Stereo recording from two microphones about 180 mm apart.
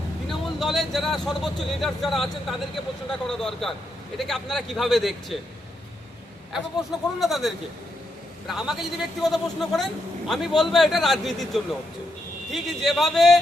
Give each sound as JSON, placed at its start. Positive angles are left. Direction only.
{"t": 0.3, "sound": "a man's voice", "side_deg": 0}
{"t": 7.2, "sound": "a man's voice", "side_deg": 0}